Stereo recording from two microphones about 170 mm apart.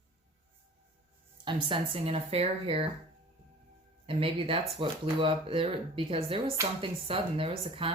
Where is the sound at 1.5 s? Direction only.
30° right (ahead or behind).